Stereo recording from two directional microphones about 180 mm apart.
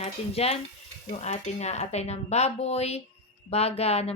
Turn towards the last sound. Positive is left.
turn(degrees=35)  # may be behind; listen again after turning